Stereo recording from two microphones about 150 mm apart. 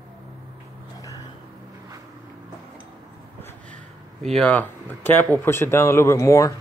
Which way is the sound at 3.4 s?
15° left (ahead or behind).